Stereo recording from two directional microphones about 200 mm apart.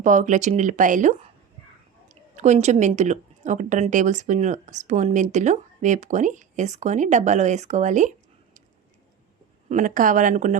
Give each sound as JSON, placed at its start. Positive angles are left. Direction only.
{"t": 0.0, "sound": "a woman's voice", "side_deg": -40}
{"t": 9.6, "sound": "a woman's voice", "side_deg": -40}